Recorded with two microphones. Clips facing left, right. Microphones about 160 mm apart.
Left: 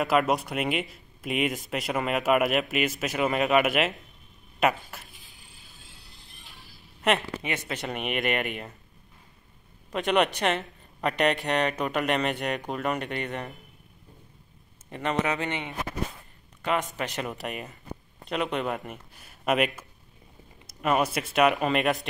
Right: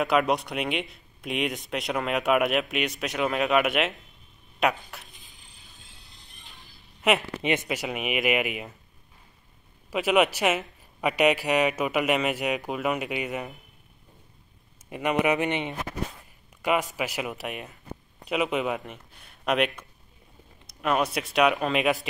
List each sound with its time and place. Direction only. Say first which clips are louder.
0.0 s speech: even; centre (ahead or behind)
5.5 s music: left 1 dB; 20° right (ahead or behind)
7.0 s speech: right 1 dB; centre (ahead or behind)
7.4 s speech: right 6 dB; 20° right (ahead or behind)
7.7 s speech: right 2 dB; 5° right (ahead or behind)
9.8 s speech: right 2 dB; 5° right (ahead or behind)
14.9 s a man's voice: right 3 dB; 10° right (ahead or behind)
16.6 s speech: right 2 dB; 5° right (ahead or behind)